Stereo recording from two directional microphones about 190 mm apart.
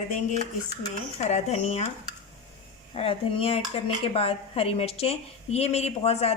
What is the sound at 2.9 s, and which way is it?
Speech, 30° left (ahead or behind).